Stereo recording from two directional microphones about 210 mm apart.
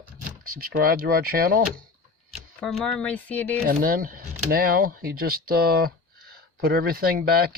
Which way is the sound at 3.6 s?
45° right (ahead or behind).